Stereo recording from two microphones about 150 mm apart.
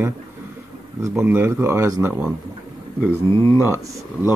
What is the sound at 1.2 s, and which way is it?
Speech, 15° right (ahead or behind).